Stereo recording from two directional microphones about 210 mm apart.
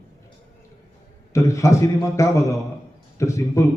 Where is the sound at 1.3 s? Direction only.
15° left (ahead or behind).